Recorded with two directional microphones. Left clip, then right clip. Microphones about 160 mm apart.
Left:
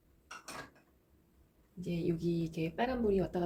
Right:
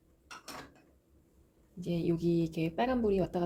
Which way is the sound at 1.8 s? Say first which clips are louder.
Right 3 dB; 55° right (ahead or behind).